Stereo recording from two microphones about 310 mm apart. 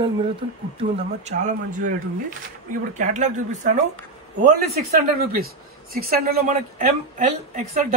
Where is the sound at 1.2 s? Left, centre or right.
Right.